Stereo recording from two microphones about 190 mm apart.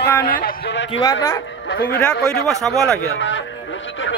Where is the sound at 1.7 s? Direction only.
65° left (ahead or behind).